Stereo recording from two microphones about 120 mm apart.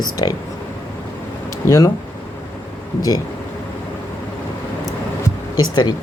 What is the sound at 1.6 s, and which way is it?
Speech, 25° left (ahead or behind).